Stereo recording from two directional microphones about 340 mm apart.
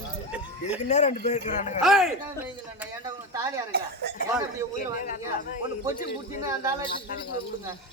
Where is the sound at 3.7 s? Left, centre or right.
Right.